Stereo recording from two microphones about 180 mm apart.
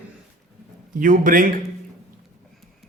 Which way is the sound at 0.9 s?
50° right (ahead or behind).